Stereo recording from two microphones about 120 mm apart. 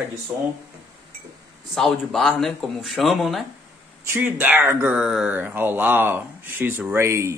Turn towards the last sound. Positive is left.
turn(degrees=-25)  # may be behind; listen again after turning